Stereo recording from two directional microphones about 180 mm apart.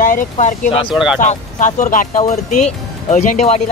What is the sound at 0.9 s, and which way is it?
Speech, 5° right (ahead or behind).